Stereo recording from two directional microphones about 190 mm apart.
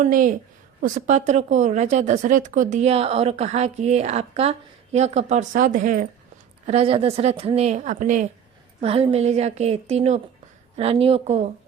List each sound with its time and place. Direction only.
0.0 s a woman's voice: 45° right (ahead or behind)
6.7 s speech: 30° right (ahead or behind)
8.8 s speech: 30° right (ahead or behind)